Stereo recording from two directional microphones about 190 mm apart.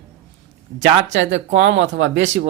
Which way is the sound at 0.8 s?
70° right (ahead or behind).